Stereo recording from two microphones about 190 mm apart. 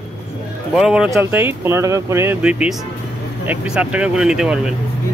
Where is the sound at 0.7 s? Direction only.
5° right (ahead or behind).